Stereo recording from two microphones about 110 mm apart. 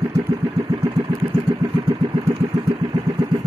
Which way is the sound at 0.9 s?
55° right (ahead or behind).